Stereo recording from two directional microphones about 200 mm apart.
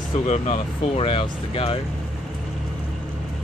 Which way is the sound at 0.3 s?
30° left (ahead or behind).